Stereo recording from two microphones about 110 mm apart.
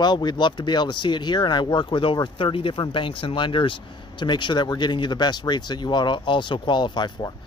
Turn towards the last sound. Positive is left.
turn(degrees=40)  # may be behind; listen again after turning